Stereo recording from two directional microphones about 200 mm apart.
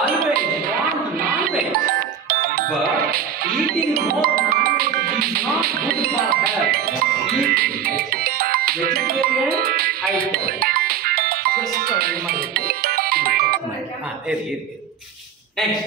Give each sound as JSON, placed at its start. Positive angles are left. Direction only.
{"t": 0.7, "sound": "music", "side_deg": -50}